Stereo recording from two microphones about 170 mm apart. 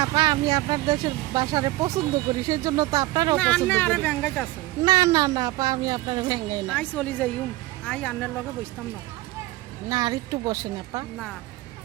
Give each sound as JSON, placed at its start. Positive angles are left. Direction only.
{"t": 0.0, "sound": "speech", "side_deg": -20}
{"t": 3.3, "sound": "speech", "side_deg": 5}
{"t": 4.8, "sound": "speech", "side_deg": -20}
{"t": 6.7, "sound": "speech", "side_deg": 10}
{"t": 9.9, "sound": "speech", "side_deg": -25}